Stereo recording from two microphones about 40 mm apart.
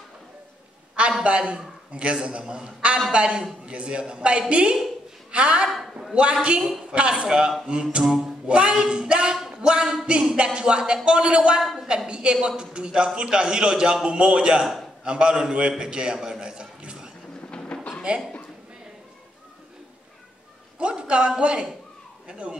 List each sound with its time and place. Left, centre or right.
1.2 s a man's voice: right
9.4 s a sound: centre
10.3 s a man's voice: right
11.6 s a woman's voice: centre
12.1 s a man's voice: right
15.8 s a sound: centre
17.5 s a sound: left
18.1 s a man's voice: right
20.8 s a man's voice: right